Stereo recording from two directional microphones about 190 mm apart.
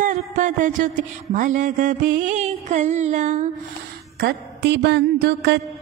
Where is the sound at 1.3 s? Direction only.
45° right (ahead or behind).